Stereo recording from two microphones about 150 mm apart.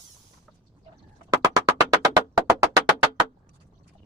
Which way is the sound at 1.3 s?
20° right (ahead or behind).